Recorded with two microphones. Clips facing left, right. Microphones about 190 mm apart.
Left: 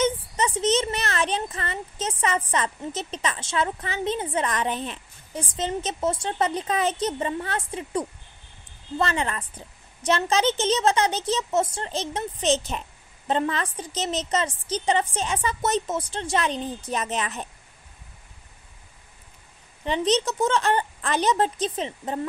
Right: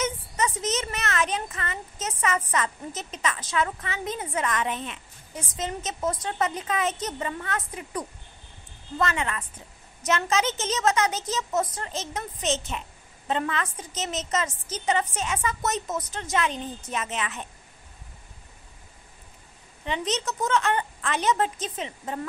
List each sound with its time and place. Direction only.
0.0 s a child's voice: 30° left (ahead or behind)
19.8 s a child's voice: 30° left (ahead or behind)